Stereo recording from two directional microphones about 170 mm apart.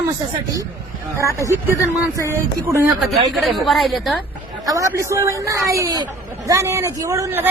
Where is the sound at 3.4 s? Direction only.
Centre (ahead or behind).